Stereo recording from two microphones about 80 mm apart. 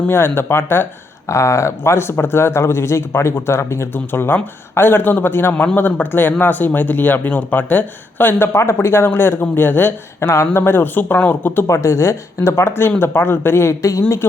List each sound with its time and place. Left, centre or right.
0.1 s speech: left
11.7 s speech: left